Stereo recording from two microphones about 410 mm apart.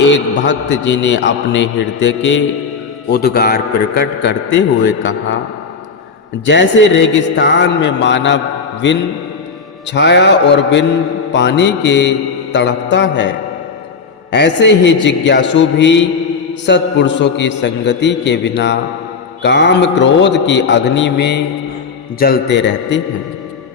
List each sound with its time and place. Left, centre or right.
0.0 s a man's voice: left
6.4 s a man's voice: left